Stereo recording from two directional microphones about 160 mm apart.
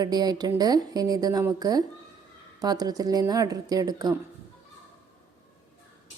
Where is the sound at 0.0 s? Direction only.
25° right (ahead or behind).